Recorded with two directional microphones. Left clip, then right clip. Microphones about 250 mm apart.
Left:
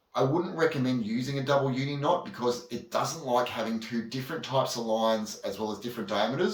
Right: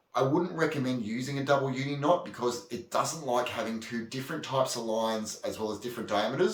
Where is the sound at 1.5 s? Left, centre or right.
Centre.